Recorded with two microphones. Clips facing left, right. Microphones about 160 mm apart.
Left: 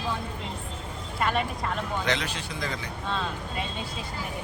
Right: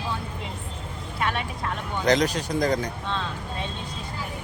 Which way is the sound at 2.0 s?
40° right (ahead or behind).